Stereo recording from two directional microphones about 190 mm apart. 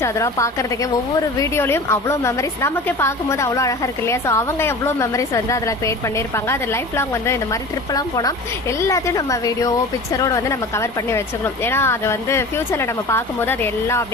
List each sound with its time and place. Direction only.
0.0 s a woman's voice: 15° left (ahead or behind)